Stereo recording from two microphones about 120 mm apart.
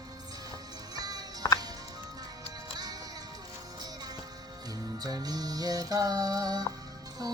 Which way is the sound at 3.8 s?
35° right (ahead or behind).